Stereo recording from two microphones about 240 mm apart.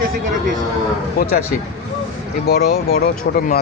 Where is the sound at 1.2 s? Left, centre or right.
Left.